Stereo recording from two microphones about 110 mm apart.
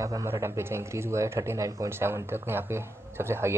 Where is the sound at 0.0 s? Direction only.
30° right (ahead or behind).